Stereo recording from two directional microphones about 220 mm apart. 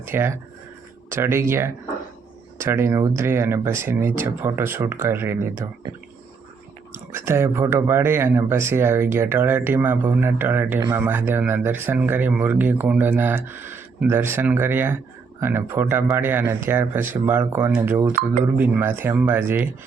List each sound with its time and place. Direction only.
0.0 s speech: 10° right (ahead or behind)
6.9 s speech: 10° right (ahead or behind)
18.1 s speech: 35° right (ahead or behind)
18.5 s speech: 10° right (ahead or behind)